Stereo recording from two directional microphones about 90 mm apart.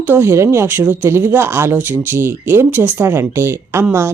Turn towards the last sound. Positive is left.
turn(degrees=-30)  # may be behind; listen again after turning